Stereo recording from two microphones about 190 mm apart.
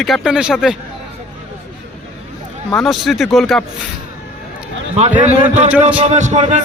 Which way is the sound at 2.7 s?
Centre (ahead or behind).